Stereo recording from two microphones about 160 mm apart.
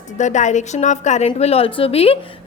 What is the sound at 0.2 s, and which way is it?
A woman's voice, 50° left (ahead or behind).